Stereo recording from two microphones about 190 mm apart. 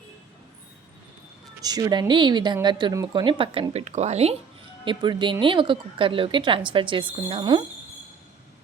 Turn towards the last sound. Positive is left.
turn(degrees=-25)  # may be behind; listen again after turning